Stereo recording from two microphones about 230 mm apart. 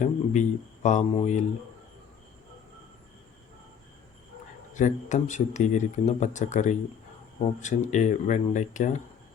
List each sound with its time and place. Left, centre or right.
0.0 s speech: left
4.7 s speech: left